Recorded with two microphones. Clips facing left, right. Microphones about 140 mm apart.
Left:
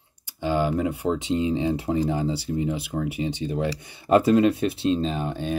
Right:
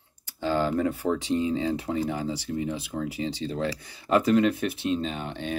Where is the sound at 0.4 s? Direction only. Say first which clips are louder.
Left 1 dB; 15° left (ahead or behind).